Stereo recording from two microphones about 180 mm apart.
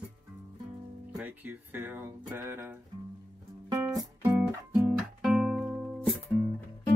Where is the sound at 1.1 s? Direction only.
10° right (ahead or behind).